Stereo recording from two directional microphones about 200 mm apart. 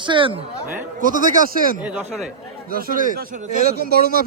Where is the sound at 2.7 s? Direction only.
45° right (ahead or behind).